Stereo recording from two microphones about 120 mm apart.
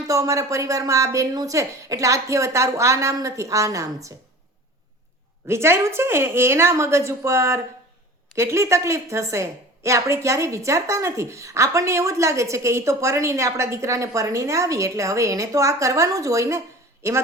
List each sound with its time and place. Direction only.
0.1 s a woman's voice: 25° right (ahead or behind)
5.5 s a woman's voice: 20° right (ahead or behind)